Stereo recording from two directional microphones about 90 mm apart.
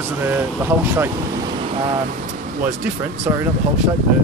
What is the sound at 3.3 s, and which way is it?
Speech, 20° right (ahead or behind).